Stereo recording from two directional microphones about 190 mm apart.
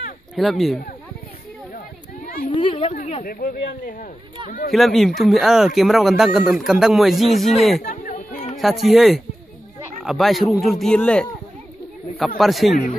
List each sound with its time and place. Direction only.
0.4 s speech: centre (ahead or behind)
2.2 s a sound: 50° left (ahead or behind)
2.5 s a woman's voice: 35° left (ahead or behind)
3.3 s speech: 50° left (ahead or behind)
4.7 s speech: centre (ahead or behind)
7.8 s chatter: 45° left (ahead or behind)
8.5 s speech: centre (ahead or behind)
12.4 s speech: centre (ahead or behind)